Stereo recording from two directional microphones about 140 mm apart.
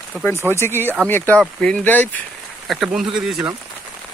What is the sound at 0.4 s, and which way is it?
Speech, 15° left (ahead or behind).